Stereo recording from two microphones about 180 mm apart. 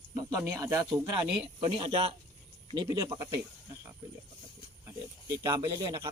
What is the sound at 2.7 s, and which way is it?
Speech, 20° right (ahead or behind).